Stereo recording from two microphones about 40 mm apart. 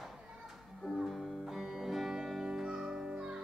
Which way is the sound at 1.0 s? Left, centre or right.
Centre.